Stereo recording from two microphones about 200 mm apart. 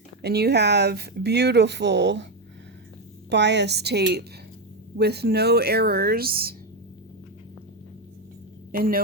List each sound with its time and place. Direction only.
0.2 s speech: 55° right (ahead or behind)
3.2 s speech: 60° right (ahead or behind)
8.7 s speech: 45° right (ahead or behind)